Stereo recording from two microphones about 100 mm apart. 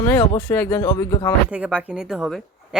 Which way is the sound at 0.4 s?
15° left (ahead or behind).